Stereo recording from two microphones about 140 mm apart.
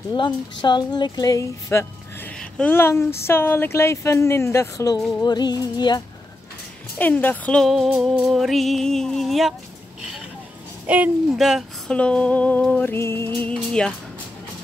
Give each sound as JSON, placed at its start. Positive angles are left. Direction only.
{"t": 0.1, "sound": "speech", "side_deg": 35}
{"t": 2.3, "sound": "speech", "side_deg": 5}
{"t": 5.2, "sound": "music", "side_deg": 30}
{"t": 7.0, "sound": "speech", "side_deg": 15}
{"t": 10.9, "sound": "speech", "side_deg": -5}